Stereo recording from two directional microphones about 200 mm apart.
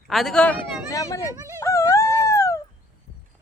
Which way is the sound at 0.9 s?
15° left (ahead or behind).